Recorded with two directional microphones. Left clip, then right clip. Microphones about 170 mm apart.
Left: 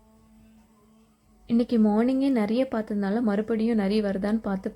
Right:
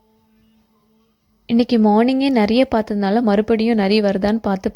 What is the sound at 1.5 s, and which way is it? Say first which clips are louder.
Speech: right 8 dB; 40° right (ahead or behind).